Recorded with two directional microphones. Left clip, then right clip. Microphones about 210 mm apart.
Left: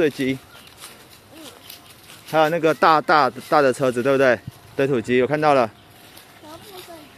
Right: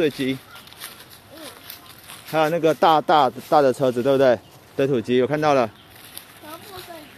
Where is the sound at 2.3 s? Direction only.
10° left (ahead or behind).